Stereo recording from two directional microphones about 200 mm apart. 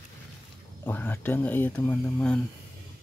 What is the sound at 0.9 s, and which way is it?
Speech, 10° left (ahead or behind).